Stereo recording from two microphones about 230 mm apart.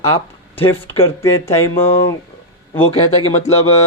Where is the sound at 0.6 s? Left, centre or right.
Centre.